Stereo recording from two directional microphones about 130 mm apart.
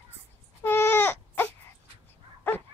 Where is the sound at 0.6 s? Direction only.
20° left (ahead or behind).